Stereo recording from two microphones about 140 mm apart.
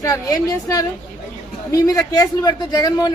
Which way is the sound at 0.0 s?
25° left (ahead or behind).